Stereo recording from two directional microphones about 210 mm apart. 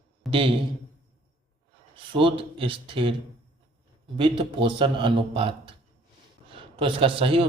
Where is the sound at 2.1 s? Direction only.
25° right (ahead or behind).